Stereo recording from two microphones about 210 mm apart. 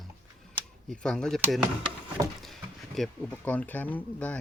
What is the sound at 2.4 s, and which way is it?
Speech, centre (ahead or behind).